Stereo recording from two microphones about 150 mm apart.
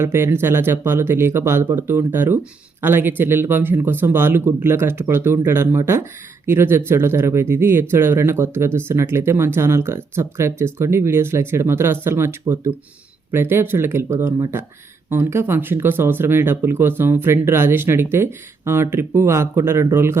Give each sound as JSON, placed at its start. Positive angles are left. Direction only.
{"t": 0.0, "sound": "speech", "side_deg": -15}